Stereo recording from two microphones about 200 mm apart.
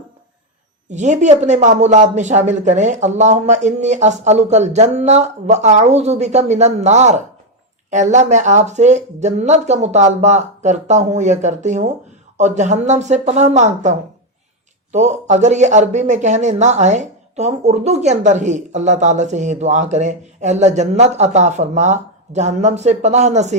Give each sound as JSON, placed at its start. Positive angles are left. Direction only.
{"t": 0.9, "sound": "speech", "side_deg": -35}
{"t": 14.9, "sound": "speech", "side_deg": -35}